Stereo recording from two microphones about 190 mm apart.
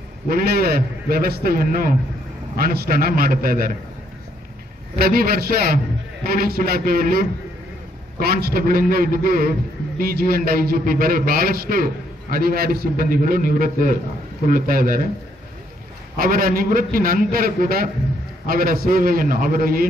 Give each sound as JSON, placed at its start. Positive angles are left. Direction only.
{"t": 0.3, "sound": "a man's voice", "side_deg": -50}
{"t": 4.9, "sound": "a man's voice", "side_deg": -50}
{"t": 16.2, "sound": "a man's voice", "side_deg": -50}